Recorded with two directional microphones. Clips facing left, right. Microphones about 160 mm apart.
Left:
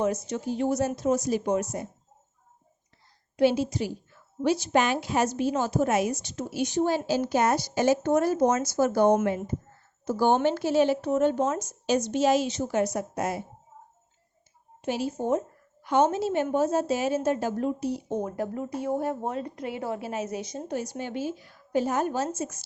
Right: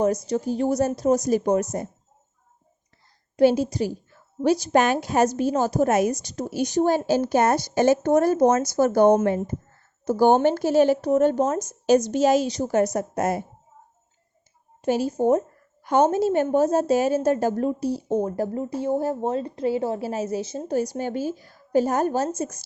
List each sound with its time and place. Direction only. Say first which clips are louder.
0.3 s a woman's voice: right 4 dB; 40° right (ahead or behind)
3.3 s speech: right 4 dB; 40° right (ahead or behind)
14.8 s a woman's voice: right 7 dB; 40° right (ahead or behind)